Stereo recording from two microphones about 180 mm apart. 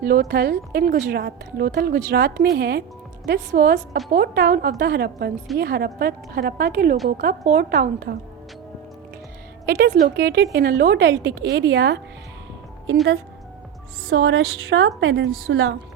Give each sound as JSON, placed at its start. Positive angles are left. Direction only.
{"t": 0.0, "sound": "a woman's voice", "side_deg": -55}
{"t": 9.6, "sound": "a woman's voice", "side_deg": -60}
{"t": 14.2, "sound": "a woman's voice", "side_deg": -90}